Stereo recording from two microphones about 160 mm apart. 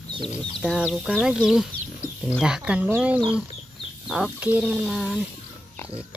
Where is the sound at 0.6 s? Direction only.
5° right (ahead or behind).